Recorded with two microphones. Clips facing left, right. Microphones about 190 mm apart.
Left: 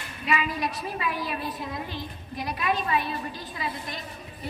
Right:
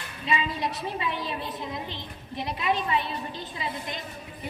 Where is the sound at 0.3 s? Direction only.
25° right (ahead or behind).